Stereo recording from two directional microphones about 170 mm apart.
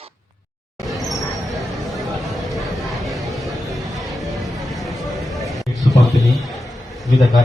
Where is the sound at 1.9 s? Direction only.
Centre (ahead or behind).